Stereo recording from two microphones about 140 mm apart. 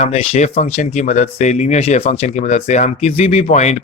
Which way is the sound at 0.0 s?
45° left (ahead or behind).